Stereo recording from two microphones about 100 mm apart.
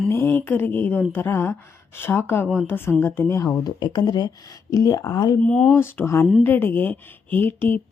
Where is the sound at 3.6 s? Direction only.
45° left (ahead or behind).